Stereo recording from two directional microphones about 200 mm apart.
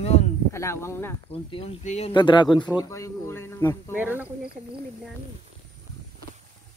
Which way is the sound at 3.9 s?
10° right (ahead or behind).